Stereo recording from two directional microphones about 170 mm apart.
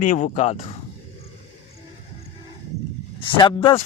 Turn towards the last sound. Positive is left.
turn(degrees=30)  # may be behind; listen again after turning